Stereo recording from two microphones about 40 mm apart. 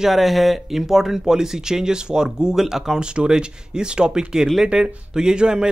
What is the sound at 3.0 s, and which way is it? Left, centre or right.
Speech, right.